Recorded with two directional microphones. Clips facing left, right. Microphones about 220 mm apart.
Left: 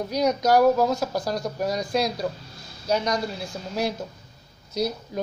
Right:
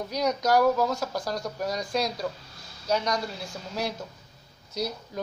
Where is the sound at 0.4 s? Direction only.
25° left (ahead or behind).